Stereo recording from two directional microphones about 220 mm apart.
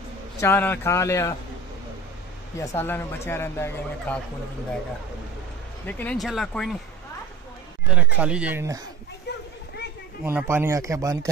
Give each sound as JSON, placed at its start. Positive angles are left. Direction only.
{"t": 0.4, "sound": "speech", "side_deg": 10}
{"t": 2.6, "sound": "speech", "side_deg": 10}
{"t": 5.9, "sound": "speech", "side_deg": 5}
{"t": 7.9, "sound": "speech", "side_deg": -5}
{"t": 9.3, "sound": "children playing", "side_deg": 50}
{"t": 10.2, "sound": "speech", "side_deg": -10}